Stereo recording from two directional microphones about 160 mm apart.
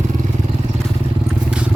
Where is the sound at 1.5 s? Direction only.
5° right (ahead or behind).